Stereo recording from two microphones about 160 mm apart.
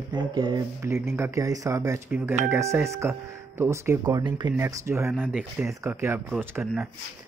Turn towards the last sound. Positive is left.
turn(degrees=-15)  # may be behind; listen again after turning